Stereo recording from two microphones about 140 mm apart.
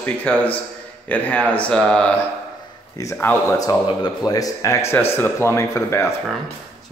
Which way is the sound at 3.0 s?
20° left (ahead or behind).